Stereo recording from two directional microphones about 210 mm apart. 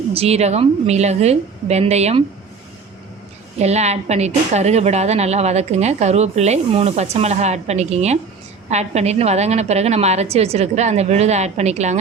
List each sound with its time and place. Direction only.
0.1 s a woman's voice: 30° right (ahead or behind)
3.6 s a woman's voice: 30° right (ahead or behind)